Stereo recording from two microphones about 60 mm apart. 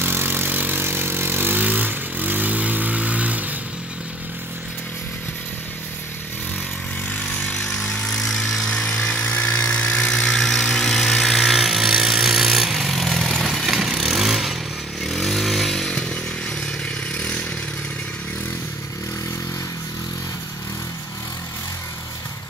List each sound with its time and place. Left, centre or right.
0.0 s vehicle: right
7.1 s vehicle: left
9.0 s vehicle: centre
9.3 s a sound: left
10.0 s a sound: centre
15.0 s motorcycle: centre